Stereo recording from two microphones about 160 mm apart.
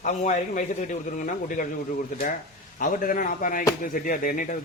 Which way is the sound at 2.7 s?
60° left (ahead or behind).